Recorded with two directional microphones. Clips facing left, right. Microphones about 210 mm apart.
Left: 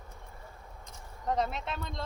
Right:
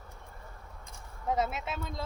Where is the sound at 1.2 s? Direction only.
5° right (ahead or behind).